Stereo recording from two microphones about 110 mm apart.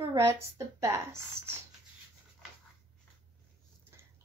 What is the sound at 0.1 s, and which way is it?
Speech, 25° right (ahead or behind).